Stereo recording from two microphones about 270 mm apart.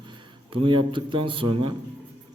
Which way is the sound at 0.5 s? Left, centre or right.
Centre.